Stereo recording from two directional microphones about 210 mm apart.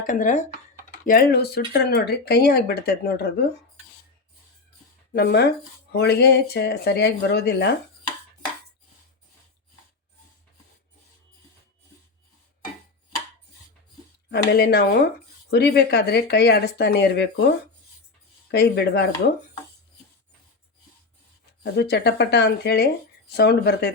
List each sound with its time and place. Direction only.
0.0 s speech: 40° left (ahead or behind)
5.1 s speech: 50° left (ahead or behind)
14.3 s speech: 50° left (ahead or behind)
18.5 s speech: 50° left (ahead or behind)
21.6 s speech: 50° left (ahead or behind)